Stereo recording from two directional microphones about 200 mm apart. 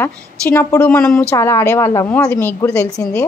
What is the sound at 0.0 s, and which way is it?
A woman's voice, 10° left (ahead or behind).